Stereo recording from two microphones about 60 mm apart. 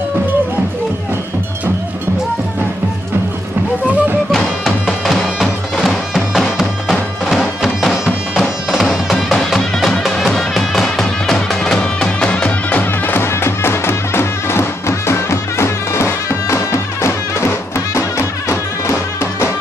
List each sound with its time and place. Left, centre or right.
4.3 s music: centre; by 12.8 s left
12.8 s music: left